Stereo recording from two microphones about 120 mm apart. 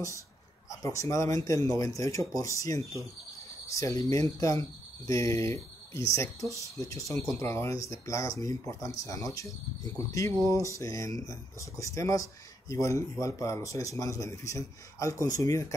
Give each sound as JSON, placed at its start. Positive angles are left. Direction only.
{"t": 0.7, "sound": "speech", "side_deg": 25}